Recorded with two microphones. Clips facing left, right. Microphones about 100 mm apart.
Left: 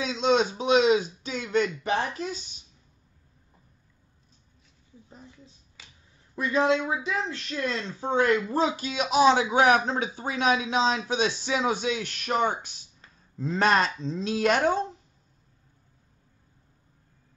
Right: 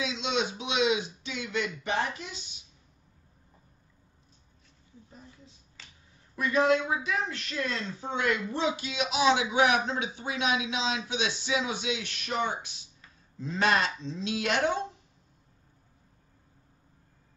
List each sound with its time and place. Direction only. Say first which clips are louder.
0.0 s speech: left 7 dB; 40° left (ahead or behind)
5.8 s finger snapping: even; 10° left (ahead or behind)
6.3 s speech: left 1 dB; 30° left (ahead or behind)
8.1 s a man's voice: left 7 dB; 40° left (ahead or behind)